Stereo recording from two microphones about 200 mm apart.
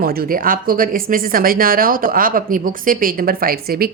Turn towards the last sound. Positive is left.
turn(degrees=-45)  # may be behind; listen again after turning